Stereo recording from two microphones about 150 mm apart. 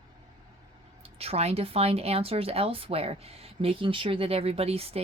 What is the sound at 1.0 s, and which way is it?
Speech, 40° right (ahead or behind).